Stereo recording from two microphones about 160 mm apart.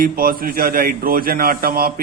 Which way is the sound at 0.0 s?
65° right (ahead or behind).